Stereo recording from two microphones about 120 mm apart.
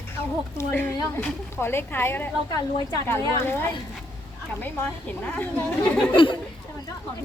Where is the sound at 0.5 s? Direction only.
15° left (ahead or behind).